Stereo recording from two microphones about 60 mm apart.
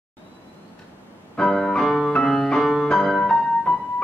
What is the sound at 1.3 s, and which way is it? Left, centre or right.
Music, centre.